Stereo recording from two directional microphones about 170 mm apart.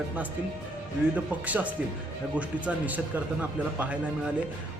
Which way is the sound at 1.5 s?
10° right (ahead or behind).